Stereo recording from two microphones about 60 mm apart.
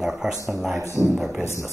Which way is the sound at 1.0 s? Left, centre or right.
Centre.